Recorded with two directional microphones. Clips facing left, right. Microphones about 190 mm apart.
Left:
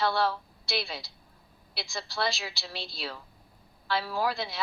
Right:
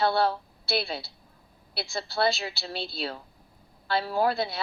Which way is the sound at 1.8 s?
55° right (ahead or behind).